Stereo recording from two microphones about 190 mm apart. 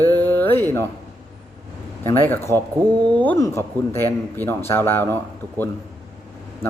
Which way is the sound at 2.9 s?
25° right (ahead or behind).